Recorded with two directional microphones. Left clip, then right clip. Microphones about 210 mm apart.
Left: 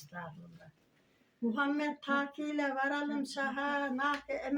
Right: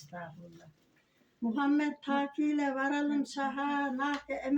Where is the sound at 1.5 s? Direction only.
15° left (ahead or behind).